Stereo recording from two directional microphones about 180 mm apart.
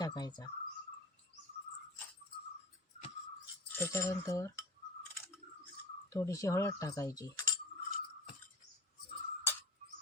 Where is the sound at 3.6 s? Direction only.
10° left (ahead or behind).